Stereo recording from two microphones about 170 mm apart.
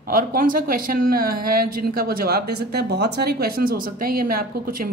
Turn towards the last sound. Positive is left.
turn(degrees=-55)  # may be behind; listen again after turning